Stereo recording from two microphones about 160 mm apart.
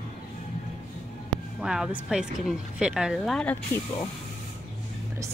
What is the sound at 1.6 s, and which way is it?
Speech, 5° right (ahead or behind).